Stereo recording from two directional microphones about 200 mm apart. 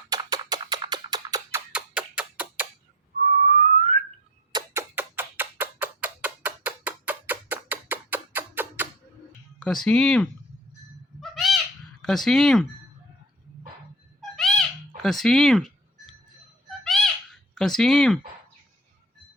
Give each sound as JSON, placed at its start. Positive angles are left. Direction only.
{"t": 0.1, "sound": "a sound", "side_deg": -20}
{"t": 3.5, "sound": "whistling", "side_deg": -40}
{"t": 4.5, "sound": "a sound", "side_deg": -15}
{"t": 9.6, "sound": "speech", "side_deg": 5}
{"t": 11.2, "sound": "owl", "side_deg": 0}
{"t": 12.0, "sound": "speech", "side_deg": 0}
{"t": 14.2, "sound": "cat", "side_deg": 0}
{"t": 14.9, "sound": "a sound", "side_deg": 0}
{"t": 16.6, "sound": "fowl", "side_deg": 0}